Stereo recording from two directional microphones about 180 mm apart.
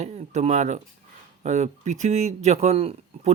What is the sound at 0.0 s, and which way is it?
Speech, 40° right (ahead or behind).